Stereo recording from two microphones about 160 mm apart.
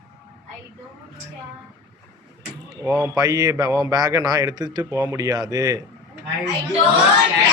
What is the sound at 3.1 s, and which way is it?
Speech, 25° right (ahead or behind).